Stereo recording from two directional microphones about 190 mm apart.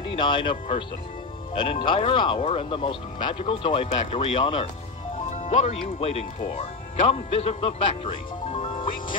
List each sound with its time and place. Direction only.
0.1 s speech: 25° left (ahead or behind)
5.4 s a man's voice: 40° left (ahead or behind)